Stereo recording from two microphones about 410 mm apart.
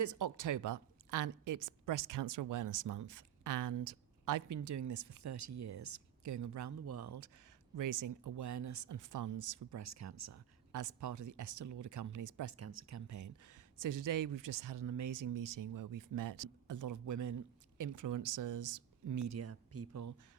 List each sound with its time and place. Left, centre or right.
0.0 s speech: right